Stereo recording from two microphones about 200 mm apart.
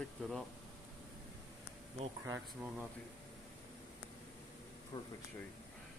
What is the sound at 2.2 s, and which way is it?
Speech, 10° right (ahead or behind).